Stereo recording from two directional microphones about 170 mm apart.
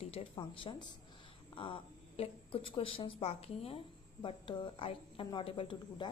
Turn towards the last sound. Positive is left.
turn(degrees=30)  # may be behind; listen again after turning